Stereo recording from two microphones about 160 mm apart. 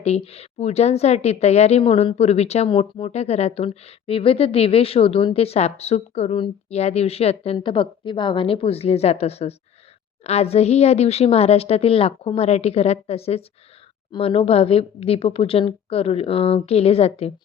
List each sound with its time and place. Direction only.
0.0 s a woman's voice: 40° left (ahead or behind)